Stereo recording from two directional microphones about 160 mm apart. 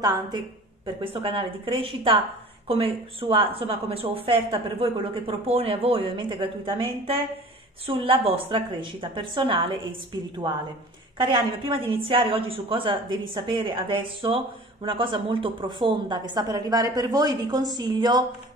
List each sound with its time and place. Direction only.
0.8 s a woman's voice: 35° right (ahead or behind)
11.1 s a woman's voice: 30° right (ahead or behind)